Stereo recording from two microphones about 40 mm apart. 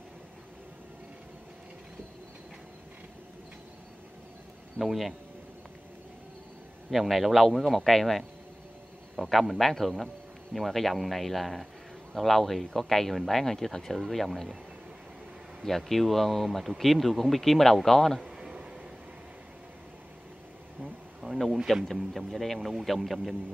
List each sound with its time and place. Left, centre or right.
4.7 s a man's voice: centre
6.9 s a man's voice: centre
15.6 s a man's voice: centre
18.4 s a sound: centre
20.8 s bee: centre
21.7 s a man's voice: centre